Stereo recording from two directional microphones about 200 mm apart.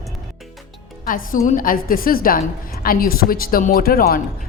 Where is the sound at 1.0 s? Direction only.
45° left (ahead or behind).